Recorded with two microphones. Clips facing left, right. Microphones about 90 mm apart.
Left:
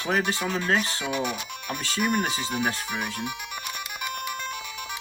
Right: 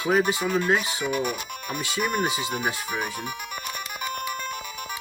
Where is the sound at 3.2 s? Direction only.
45° right (ahead or behind).